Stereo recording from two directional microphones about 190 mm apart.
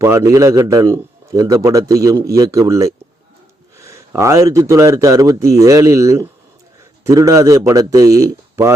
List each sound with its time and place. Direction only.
0.0 s a man's voice: 15° right (ahead or behind)